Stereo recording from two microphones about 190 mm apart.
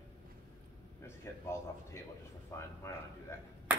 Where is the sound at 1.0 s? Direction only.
15° left (ahead or behind).